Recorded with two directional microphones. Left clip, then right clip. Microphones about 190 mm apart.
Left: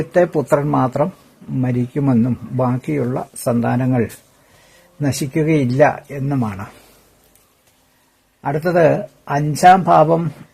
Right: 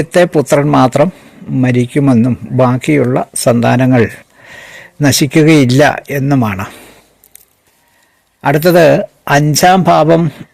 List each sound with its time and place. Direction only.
0.1 s speech: 20° right (ahead or behind)
8.4 s speech: 35° right (ahead or behind)